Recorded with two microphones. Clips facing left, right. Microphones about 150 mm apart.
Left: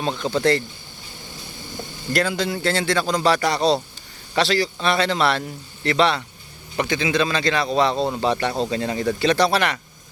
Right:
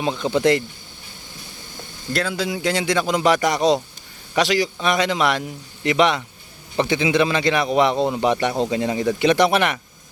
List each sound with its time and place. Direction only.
0.0 s a man's voice: 10° right (ahead or behind)
0.3 s a man's voice: 20° right (ahead or behind)
2.1 s a man's voice: 5° right (ahead or behind); by 9.8 s 20° right (ahead or behind)